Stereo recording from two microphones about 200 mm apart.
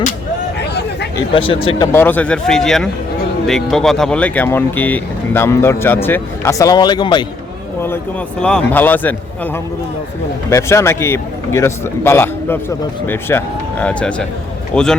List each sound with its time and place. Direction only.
0.6 s a sound: 55° left (ahead or behind)
1.1 s speech: 25° left (ahead or behind)
1.9 s a man's voice: 10° left (ahead or behind)
8.4 s speech: 5° left (ahead or behind)
10.5 s a man's voice: 15° left (ahead or behind)